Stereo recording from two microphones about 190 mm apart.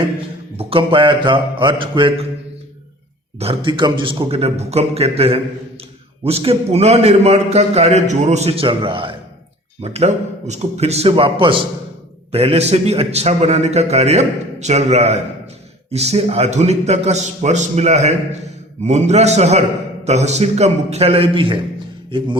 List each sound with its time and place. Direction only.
0.5 s mantra: 30° right (ahead or behind)
3.3 s a man's voice: 30° right (ahead or behind)